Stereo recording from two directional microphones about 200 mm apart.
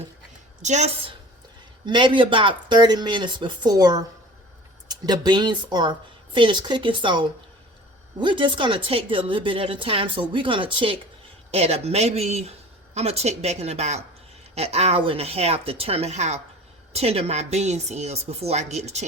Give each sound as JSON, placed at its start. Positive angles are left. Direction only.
{"t": 0.6, "sound": "speech", "side_deg": -35}
{"t": 1.9, "sound": "a woman's voice", "side_deg": -25}